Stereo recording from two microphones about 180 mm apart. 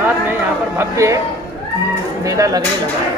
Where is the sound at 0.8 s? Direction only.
15° right (ahead or behind).